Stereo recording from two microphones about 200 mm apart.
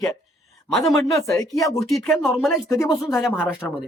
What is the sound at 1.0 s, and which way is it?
Speech, 15° left (ahead or behind).